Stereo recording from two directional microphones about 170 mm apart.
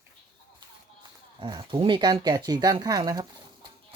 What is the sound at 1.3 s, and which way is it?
Speech, 25° right (ahead or behind).